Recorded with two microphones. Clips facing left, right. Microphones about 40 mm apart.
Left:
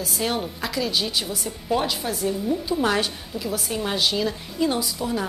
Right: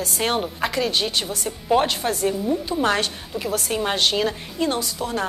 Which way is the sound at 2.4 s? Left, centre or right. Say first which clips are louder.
Even; right.